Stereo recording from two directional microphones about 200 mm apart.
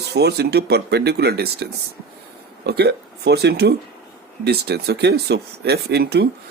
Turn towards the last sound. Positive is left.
turn(degrees=-55)  # may be behind; listen again after turning